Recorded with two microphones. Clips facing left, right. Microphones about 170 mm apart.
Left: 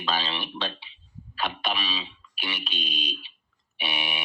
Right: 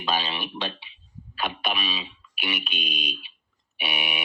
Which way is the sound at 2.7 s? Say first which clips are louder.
Right 1 dB; 15° right (ahead or behind).